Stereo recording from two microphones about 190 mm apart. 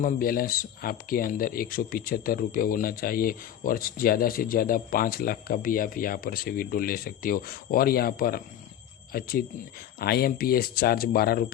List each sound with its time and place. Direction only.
0.0 s speech: 50° left (ahead or behind)